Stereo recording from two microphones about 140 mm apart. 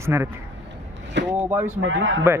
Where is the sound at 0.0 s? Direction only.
20° right (ahead or behind).